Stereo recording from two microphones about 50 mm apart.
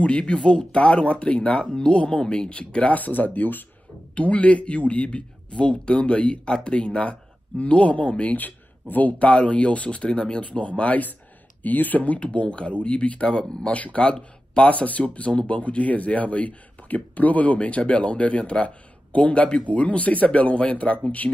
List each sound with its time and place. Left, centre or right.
0.0 s speech: left
4.1 s speech: left
13.7 s speech: left
14.0 s speech: centre